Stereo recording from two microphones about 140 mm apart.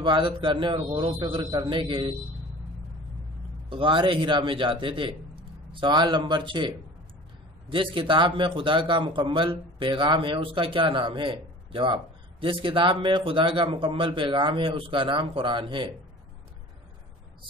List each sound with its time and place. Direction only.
0.0 s a man's voice: 35° right (ahead or behind)
3.6 s a man's voice: 35° right (ahead or behind)
7.7 s a man's voice: 40° right (ahead or behind)